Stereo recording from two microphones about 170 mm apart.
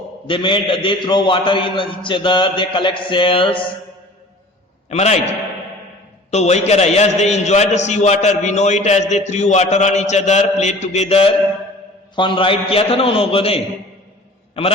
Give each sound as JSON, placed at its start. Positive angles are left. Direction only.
{"t": 0.3, "sound": "a man's voice", "side_deg": 30}
{"t": 4.9, "sound": "a man's voice", "side_deg": 40}
{"t": 6.3, "sound": "a man's voice", "side_deg": 40}